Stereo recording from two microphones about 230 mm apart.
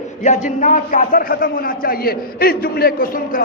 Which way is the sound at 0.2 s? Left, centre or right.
Left.